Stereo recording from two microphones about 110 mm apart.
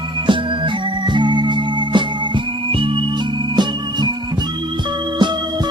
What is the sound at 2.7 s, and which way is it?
Organ, 55° right (ahead or behind).